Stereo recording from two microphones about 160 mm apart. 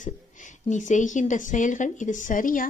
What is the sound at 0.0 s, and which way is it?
A woman's voice, 50° left (ahead or behind).